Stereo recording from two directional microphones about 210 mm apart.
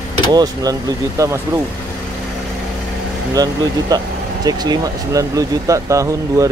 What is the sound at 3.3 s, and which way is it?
Speech, 15° right (ahead or behind).